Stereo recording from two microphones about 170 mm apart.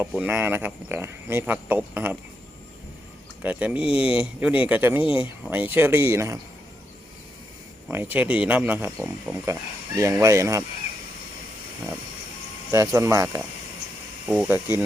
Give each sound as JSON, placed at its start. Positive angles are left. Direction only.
{"t": 0.0, "sound": "speech", "side_deg": -10}
{"t": 3.4, "sound": "speech", "side_deg": -10}
{"t": 7.9, "sound": "speech", "side_deg": -10}
{"t": 9.5, "sound": "speech", "side_deg": -15}
{"t": 12.7, "sound": "speech", "side_deg": -15}
{"t": 14.3, "sound": "speech", "side_deg": -5}